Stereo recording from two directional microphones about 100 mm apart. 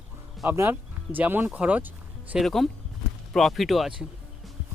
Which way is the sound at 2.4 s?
Centre (ahead or behind).